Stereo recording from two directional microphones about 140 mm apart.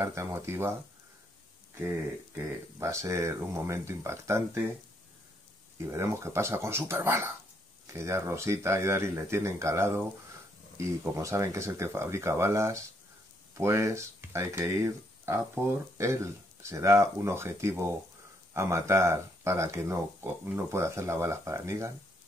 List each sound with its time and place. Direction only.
0.0 s speech: 20° right (ahead or behind)
1.8 s speech: 15° right (ahead or behind)
5.8 s speech: 20° right (ahead or behind)